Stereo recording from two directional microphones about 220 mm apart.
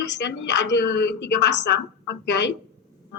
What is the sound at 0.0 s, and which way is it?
A woman's voice, 50° left (ahead or behind).